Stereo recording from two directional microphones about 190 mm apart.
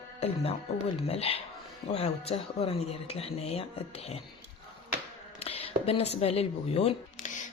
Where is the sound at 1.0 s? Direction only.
30° left (ahead or behind).